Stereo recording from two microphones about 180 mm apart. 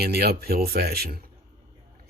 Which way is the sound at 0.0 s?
60° right (ahead or behind).